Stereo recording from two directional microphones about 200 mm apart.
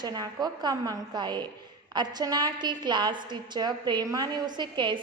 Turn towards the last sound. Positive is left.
turn(degrees=-20)  # may be behind; listen again after turning